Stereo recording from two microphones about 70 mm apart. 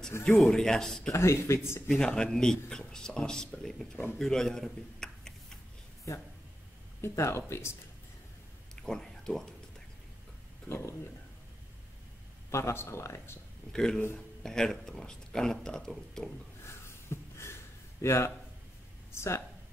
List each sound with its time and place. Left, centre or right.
0.4 s speech: centre
1.1 s speech: left
1.9 s a man's voice: centre
7.0 s speech: left
8.8 s speech: centre
10.7 s speech: left
12.4 s speech: left
13.7 s speech: centre
16.6 s a sound: left
18.0 s speech: left